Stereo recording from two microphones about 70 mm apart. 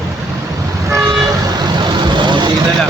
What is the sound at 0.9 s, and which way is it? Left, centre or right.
Toot, right.